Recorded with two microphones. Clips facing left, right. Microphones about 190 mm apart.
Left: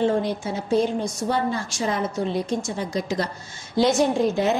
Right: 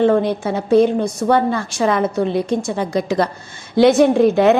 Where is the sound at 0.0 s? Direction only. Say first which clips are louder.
Right 7 dB; 60° right (ahead or behind).